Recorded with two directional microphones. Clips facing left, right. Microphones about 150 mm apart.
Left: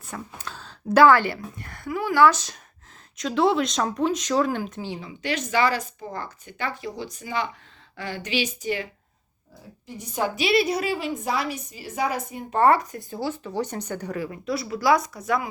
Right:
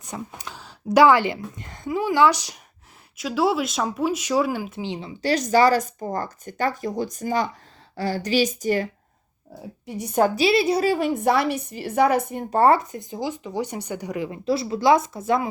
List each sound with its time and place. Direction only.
0.0 s a woman's voice: 15° right (ahead or behind)
4.9 s speech: 30° right (ahead or behind)
9.8 s a woman's voice: 60° right (ahead or behind)
10.3 s a woman's voice: 30° right (ahead or behind); by 12.5 s 55° right (ahead or behind)
12.5 s speech: 30° right (ahead or behind)